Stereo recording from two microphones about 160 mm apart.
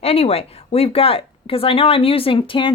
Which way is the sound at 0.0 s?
40° left (ahead or behind).